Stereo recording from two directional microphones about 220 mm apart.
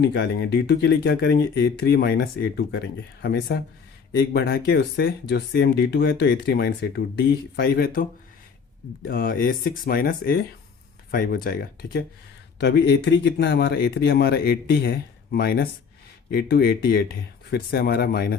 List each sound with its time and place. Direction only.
0.0 s speech: 50° left (ahead or behind)
9.0 s speech: 40° left (ahead or behind)